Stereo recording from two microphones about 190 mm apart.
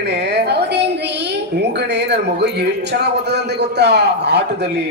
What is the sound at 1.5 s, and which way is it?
A man's voice, 60° right (ahead or behind).